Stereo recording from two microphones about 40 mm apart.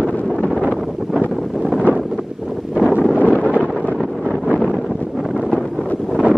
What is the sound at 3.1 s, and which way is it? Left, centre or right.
Wind noise, left.